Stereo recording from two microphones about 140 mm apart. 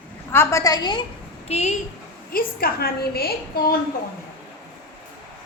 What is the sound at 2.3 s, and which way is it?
A woman's voice, 90° left.